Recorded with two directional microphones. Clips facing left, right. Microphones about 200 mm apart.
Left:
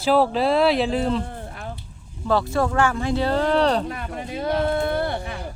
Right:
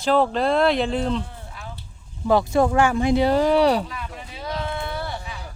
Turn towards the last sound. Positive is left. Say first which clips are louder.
# left 6 dB
turn(degrees=55)  # may be behind; listen again after turning